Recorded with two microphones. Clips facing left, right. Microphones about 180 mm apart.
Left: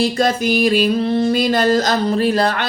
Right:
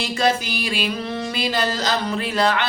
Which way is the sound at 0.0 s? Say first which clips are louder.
Left 5 dB; 40° left (ahead or behind).